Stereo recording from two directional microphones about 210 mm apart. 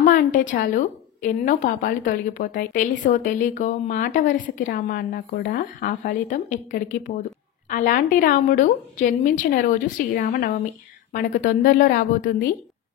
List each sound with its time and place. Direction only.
0.0 s a woman's voice: 40° left (ahead or behind)